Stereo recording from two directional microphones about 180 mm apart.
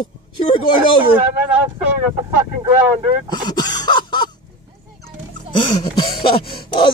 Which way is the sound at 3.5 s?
25° left (ahead or behind).